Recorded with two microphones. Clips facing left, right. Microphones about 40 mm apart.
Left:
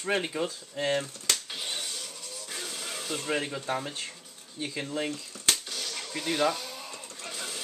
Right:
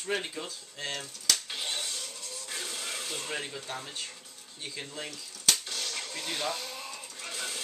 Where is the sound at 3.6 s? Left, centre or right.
Left.